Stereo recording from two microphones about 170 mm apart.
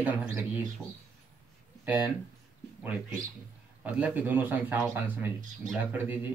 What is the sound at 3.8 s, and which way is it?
Speech, 10° right (ahead or behind).